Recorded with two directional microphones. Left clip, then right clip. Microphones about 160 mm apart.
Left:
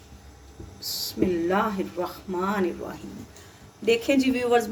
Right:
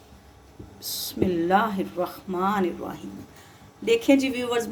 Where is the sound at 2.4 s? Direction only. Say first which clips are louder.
Right 2 dB; 65° right (ahead or behind).